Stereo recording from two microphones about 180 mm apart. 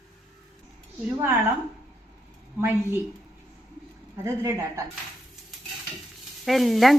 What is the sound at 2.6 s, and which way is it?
Speech, 15° right (ahead or behind).